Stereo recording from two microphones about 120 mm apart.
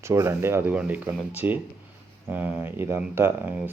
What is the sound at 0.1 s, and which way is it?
Speech, 25° right (ahead or behind).